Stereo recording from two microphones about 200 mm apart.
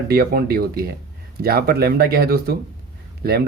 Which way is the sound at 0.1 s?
50° right (ahead or behind).